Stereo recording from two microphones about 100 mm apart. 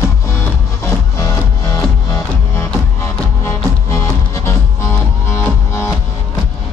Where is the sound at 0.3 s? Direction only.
25° left (ahead or behind).